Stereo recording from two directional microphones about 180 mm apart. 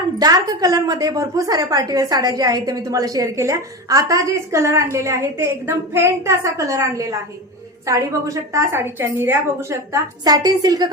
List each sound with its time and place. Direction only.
0.2 s a woman's voice: 20° right (ahead or behind)